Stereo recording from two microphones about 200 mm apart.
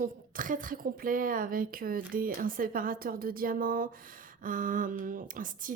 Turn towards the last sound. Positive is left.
turn(degrees=-40)  # may be behind; listen again after turning